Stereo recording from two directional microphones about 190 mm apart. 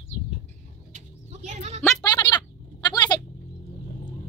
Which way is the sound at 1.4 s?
35° right (ahead or behind).